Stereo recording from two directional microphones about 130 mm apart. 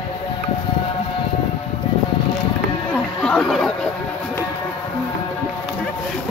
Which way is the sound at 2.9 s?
5° left (ahead or behind).